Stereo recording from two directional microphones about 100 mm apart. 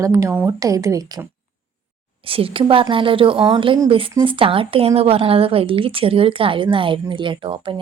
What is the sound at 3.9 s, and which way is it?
Speech, 65° right (ahead or behind).